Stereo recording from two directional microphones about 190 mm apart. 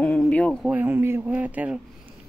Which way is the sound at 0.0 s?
5° left (ahead or behind).